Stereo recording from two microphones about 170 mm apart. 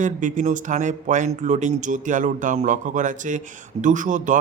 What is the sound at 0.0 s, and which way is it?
Speech, 50° right (ahead or behind).